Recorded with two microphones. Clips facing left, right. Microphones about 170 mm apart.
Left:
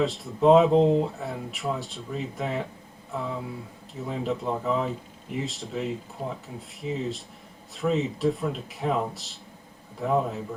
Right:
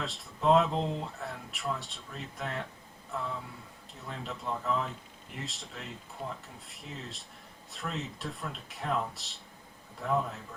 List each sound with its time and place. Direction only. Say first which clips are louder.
0.0 s speech: left 9 dB; centre (ahead or behind)
0.7 s speech: left 13 dB; 40° left (ahead or behind)
1.0 s speech: left 8 dB; centre (ahead or behind)